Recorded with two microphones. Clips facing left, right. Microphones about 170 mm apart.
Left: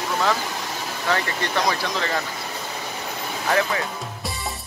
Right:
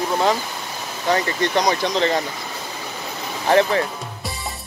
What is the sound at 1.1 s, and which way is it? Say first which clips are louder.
Speech: right 5 dB; 15° right (ahead or behind).